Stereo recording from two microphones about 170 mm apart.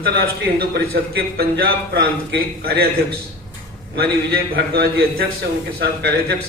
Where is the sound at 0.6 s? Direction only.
65° right (ahead or behind).